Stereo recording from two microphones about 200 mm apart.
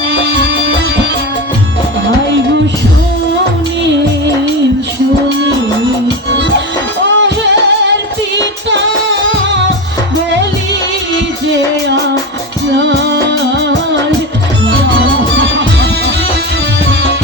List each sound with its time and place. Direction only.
7.0 s music: 65° right (ahead or behind)
12.7 s music: 60° right (ahead or behind)